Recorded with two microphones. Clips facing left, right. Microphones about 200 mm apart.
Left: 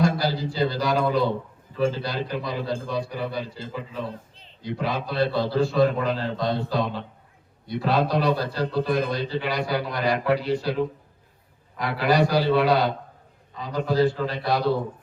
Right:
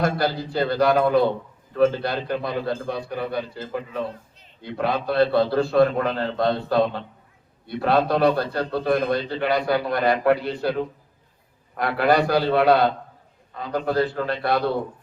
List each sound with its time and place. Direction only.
0.0 s a man's voice: 55° right (ahead or behind)
11.8 s a man's voice: 55° right (ahead or behind)